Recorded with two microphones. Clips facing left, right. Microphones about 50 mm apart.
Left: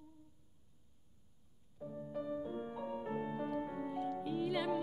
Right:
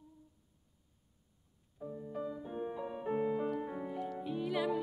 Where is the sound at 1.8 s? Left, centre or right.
Centre.